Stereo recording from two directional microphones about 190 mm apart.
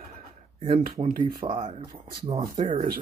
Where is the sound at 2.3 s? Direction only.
20° right (ahead or behind).